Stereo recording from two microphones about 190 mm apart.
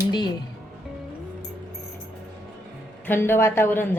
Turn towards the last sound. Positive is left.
turn(degrees=10)  # may be behind; listen again after turning